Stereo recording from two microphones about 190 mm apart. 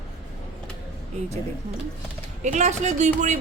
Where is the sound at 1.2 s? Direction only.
35° right (ahead or behind).